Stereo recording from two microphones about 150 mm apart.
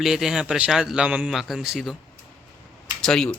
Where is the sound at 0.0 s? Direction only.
5° right (ahead or behind).